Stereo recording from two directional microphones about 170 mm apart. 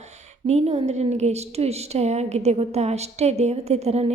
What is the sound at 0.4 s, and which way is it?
A woman's voice, 40° right (ahead or behind).